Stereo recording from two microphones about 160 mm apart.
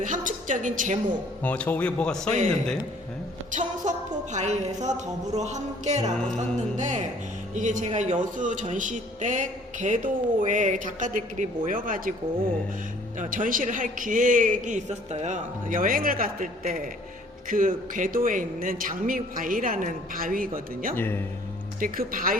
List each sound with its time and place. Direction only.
0.0 s a woman's voice: 55° right (ahead or behind)
1.4 s a man's voice: 10° left (ahead or behind)
3.8 s speech: 50° right (ahead or behind)
13.1 s speech: 55° right (ahead or behind)
20.9 s a man's voice: 15° left (ahead or behind)
21.8 s speech: 60° right (ahead or behind)